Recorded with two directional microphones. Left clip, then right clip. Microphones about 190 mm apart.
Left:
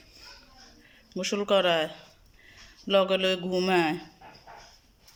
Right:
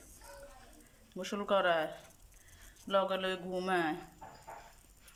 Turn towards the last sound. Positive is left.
turn(degrees=10)  # may be behind; listen again after turning